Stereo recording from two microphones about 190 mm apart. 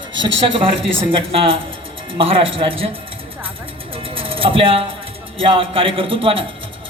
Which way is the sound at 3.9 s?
30° right (ahead or behind).